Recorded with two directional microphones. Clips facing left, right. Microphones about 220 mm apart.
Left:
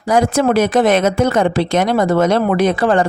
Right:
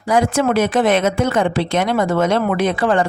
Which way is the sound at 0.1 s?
40° left (ahead or behind).